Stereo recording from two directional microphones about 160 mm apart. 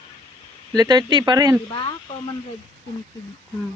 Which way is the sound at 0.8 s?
25° right (ahead or behind).